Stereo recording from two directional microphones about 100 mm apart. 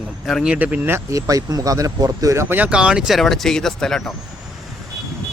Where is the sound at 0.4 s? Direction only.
10° right (ahead or behind).